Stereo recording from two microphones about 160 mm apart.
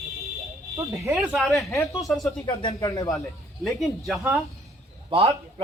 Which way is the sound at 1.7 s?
20° left (ahead or behind).